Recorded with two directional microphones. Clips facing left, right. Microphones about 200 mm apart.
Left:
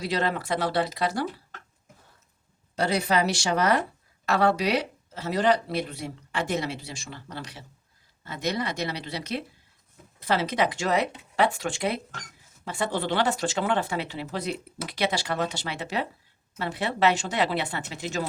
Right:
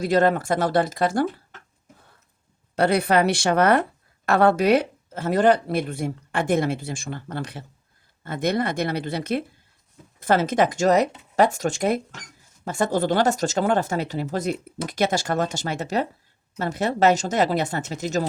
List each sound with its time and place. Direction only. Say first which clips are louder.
0.0 s speech: right 8 dB; 50° right (ahead or behind)
2.7 s a woman's voice: right 5 dB; 60° right (ahead or behind); by 18.3 s 40° right (ahead or behind)